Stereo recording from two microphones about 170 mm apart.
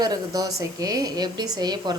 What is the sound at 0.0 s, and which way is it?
A woman's voice, 20° right (ahead or behind).